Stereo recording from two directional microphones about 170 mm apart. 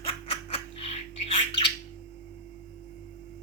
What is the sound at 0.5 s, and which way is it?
Bird, 35° left (ahead or behind).